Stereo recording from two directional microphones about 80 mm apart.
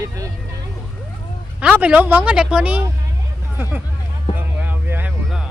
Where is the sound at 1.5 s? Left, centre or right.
Centre.